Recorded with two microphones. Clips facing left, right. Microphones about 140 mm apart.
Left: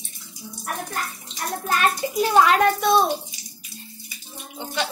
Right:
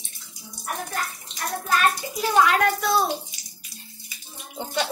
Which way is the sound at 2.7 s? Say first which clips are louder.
Left 4 dB; 25° left (ahead or behind).